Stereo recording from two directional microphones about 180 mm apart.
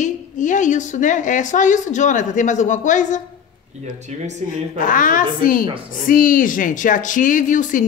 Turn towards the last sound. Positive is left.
turn(degrees=45)  # may be behind; listen again after turning